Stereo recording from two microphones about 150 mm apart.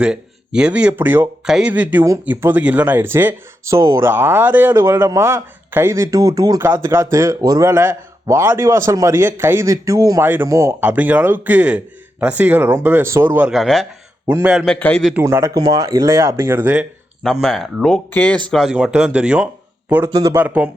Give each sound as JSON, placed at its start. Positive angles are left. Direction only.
{"t": 0.0, "sound": "speech", "side_deg": -5}
{"t": 13.5, "sound": "speech", "side_deg": 0}
{"t": 14.3, "sound": "speech", "side_deg": -10}
{"t": 14.7, "sound": "a man's voice", "side_deg": 10}
{"t": 15.1, "sound": "speech", "side_deg": -15}
{"t": 17.4, "sound": "speech", "side_deg": 0}
{"t": 19.9, "sound": "speech", "side_deg": -20}